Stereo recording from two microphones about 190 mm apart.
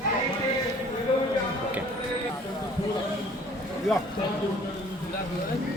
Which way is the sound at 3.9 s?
Centre (ahead or behind).